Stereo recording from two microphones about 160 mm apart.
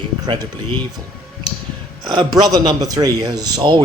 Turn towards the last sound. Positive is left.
turn(degrees=-30)  # may be behind; listen again after turning